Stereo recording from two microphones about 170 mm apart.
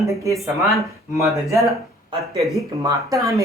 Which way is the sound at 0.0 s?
15° right (ahead or behind).